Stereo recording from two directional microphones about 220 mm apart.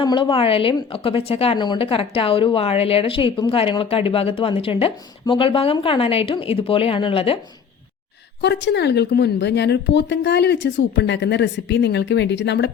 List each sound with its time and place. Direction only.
0.0 s a woman's voice: 20° left (ahead or behind)
8.4 s speech: 50° left (ahead or behind)